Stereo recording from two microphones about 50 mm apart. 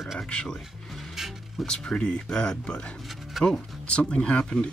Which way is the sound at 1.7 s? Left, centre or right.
Centre.